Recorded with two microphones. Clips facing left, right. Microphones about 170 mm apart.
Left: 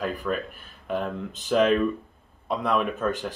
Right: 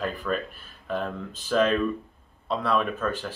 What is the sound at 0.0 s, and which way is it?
Speech, 10° left (ahead or behind).